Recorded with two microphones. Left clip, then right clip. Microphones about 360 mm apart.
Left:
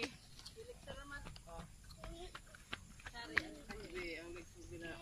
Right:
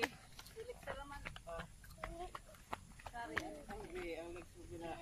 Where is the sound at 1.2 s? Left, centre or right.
Right.